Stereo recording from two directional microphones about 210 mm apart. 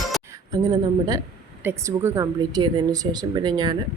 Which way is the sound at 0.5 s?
20° right (ahead or behind).